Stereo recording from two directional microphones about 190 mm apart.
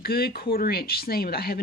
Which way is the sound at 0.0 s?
55° left (ahead or behind).